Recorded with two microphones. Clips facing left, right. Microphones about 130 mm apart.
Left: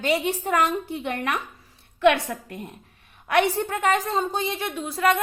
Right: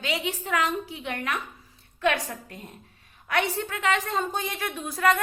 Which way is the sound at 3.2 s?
55° left (ahead or behind).